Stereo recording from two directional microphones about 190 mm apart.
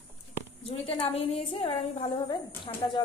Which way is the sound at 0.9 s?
30° left (ahead or behind).